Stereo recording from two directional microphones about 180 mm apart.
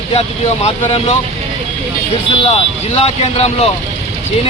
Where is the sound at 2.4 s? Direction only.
35° left (ahead or behind).